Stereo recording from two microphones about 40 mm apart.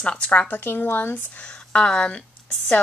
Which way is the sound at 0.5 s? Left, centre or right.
Left.